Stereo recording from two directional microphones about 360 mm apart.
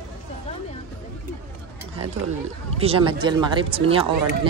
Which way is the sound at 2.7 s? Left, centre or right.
Centre.